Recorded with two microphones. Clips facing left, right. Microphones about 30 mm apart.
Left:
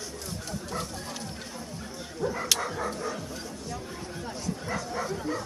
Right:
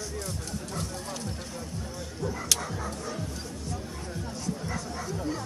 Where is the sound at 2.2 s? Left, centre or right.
Centre.